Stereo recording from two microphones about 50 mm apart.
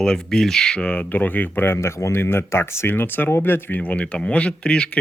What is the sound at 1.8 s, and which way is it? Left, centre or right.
Speech, left.